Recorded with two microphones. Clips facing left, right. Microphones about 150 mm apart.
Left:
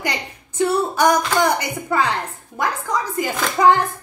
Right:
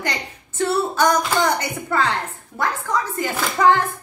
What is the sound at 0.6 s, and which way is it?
A woman's voice, 15° left (ahead or behind).